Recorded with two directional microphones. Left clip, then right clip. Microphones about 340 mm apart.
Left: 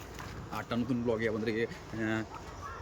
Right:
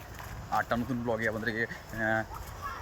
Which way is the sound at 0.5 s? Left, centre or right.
Centre.